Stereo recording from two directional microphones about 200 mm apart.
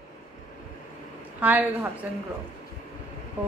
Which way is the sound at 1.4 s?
10° right (ahead or behind).